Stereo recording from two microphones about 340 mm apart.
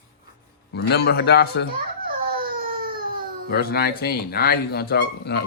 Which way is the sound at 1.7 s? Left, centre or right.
Right.